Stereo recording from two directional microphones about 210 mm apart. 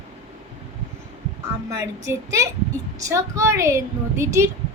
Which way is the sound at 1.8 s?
15° right (ahead or behind).